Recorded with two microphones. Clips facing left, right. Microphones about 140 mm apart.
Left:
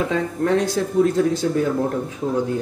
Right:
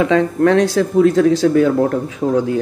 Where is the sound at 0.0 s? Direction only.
85° right.